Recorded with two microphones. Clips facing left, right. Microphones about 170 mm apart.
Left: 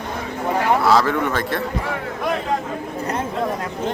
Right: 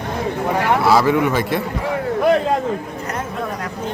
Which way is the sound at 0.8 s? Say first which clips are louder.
Right 2 dB; 10° right (ahead or behind).